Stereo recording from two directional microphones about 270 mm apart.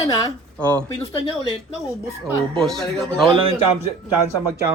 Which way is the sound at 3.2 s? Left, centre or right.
Centre.